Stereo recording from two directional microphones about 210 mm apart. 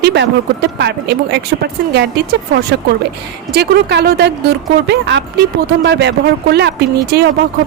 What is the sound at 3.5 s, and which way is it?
Speech, 50° right (ahead or behind).